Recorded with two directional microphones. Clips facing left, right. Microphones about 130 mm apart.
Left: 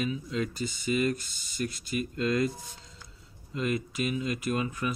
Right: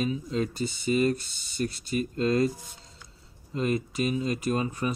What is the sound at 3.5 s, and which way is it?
Speech, 35° right (ahead or behind).